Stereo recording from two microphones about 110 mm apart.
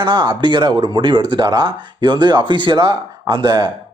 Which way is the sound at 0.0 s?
45° right (ahead or behind).